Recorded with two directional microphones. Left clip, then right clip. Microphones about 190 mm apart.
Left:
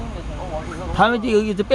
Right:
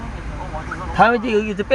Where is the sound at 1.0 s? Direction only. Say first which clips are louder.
Right 3 dB; centre (ahead or behind).